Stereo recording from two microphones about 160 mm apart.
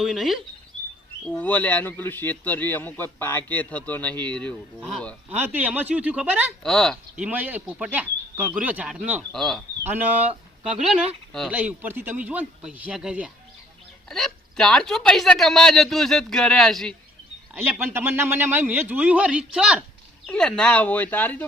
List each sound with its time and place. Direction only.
0.0 s speech: centre (ahead or behind)
5.3 s a man's voice: 10° right (ahead or behind)
6.6 s speech: 5° left (ahead or behind)
7.2 s a man's voice: 10° right (ahead or behind)
9.3 s speech: 5° left (ahead or behind)
9.8 s a man's voice: 10° right (ahead or behind)
17.5 s a man's voice: 15° right (ahead or behind)
20.2 s speech: 5° left (ahead or behind)